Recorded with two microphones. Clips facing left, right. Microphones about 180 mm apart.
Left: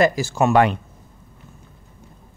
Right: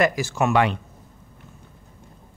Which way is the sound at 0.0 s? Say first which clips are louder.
Left 3 dB; 30° left (ahead or behind).